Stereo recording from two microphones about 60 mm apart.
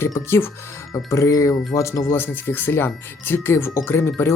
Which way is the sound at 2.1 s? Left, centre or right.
Left.